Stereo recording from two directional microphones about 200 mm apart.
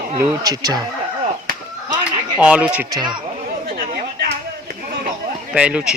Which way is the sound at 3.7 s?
50° right (ahead or behind).